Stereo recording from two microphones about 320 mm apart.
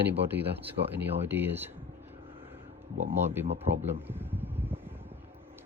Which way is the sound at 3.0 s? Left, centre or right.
Centre.